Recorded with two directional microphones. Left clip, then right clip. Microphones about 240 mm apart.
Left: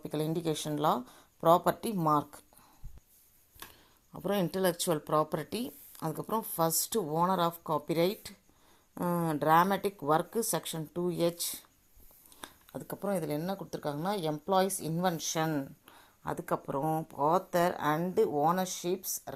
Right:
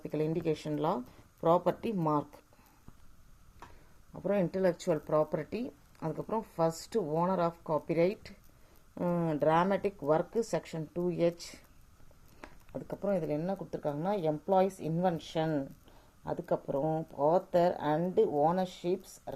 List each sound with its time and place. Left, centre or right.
0.0 s speech: centre
4.1 s speech: centre
5.5 s speech: left
6.0 s speech: centre
17.0 s speech: left
17.2 s speech: centre